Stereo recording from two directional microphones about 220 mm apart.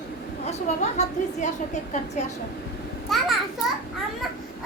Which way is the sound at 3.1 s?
Centre (ahead or behind).